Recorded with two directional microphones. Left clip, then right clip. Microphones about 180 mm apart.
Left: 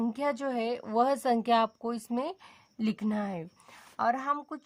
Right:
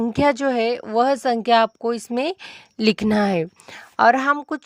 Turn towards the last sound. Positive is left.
turn(degrees=-40)  # may be behind; listen again after turning